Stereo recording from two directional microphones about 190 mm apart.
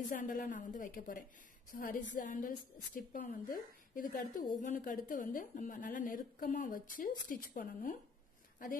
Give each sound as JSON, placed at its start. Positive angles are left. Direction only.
{"t": 0.1, "sound": "a woman's voice", "side_deg": 45}